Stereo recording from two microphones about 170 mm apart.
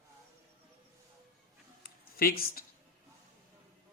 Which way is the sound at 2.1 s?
60° left (ahead or behind).